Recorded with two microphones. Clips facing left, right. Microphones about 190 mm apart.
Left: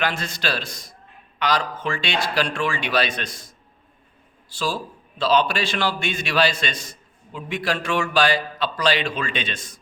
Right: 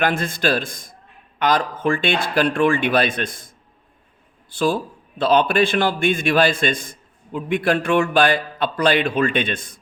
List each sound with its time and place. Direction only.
0.0 s a man's voice: 50° right (ahead or behind)